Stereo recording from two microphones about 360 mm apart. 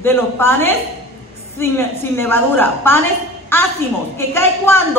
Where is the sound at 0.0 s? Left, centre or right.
Centre.